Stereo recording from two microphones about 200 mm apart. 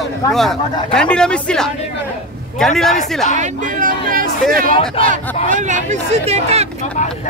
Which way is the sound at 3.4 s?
40° right (ahead or behind).